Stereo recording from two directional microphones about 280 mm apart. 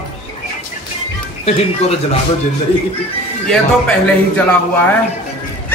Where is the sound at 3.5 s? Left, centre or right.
Centre.